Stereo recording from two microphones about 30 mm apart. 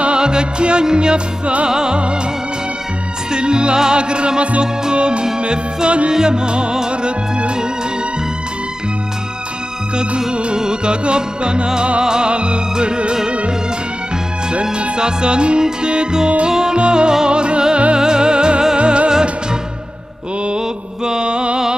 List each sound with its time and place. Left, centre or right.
0.2 s music: right
3.3 s music: right
4.4 s music: right
9.9 s music: right
12.3 s music: right
14.5 s music: right
21.0 s mantra: right